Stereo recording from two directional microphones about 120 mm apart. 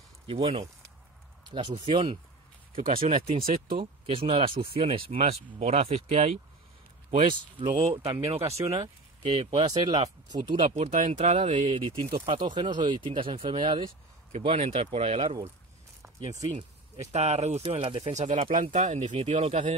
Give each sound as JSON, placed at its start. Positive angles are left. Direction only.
{"t": 0.3, "sound": "speech", "side_deg": -50}
{"t": 1.9, "sound": "speech", "side_deg": -45}
{"t": 7.5, "sound": "speech", "side_deg": -45}
{"t": 8.4, "sound": "speech", "side_deg": -25}
{"t": 8.7, "sound": "speech", "side_deg": -40}
{"t": 10.3, "sound": "speech", "side_deg": -40}
{"t": 10.8, "sound": "speech", "side_deg": -85}
{"t": 11.7, "sound": "speech", "side_deg": -45}
{"t": 16.5, "sound": "speech", "side_deg": -55}
{"t": 17.6, "sound": "speech", "side_deg": -45}
{"t": 18.0, "sound": "speech", "side_deg": -75}